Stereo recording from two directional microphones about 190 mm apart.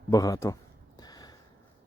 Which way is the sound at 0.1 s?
20° left (ahead or behind).